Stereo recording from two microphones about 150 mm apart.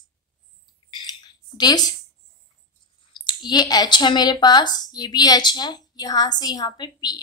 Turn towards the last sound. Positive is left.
turn(degrees=30)  # may be behind; listen again after turning